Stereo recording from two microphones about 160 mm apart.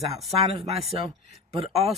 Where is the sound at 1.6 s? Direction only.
40° right (ahead or behind).